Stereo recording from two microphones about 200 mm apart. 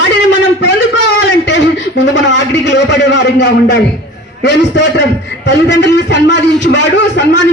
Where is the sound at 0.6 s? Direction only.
60° left (ahead or behind).